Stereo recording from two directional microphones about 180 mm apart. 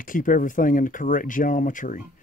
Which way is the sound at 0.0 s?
50° left (ahead or behind).